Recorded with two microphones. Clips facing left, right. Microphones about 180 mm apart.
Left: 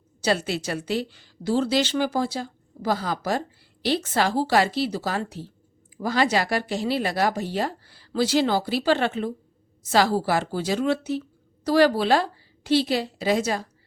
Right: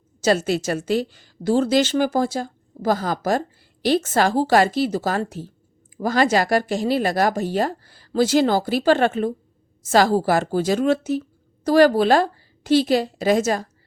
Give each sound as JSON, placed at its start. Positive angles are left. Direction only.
{"t": 0.2, "sound": "a woman's voice", "side_deg": -45}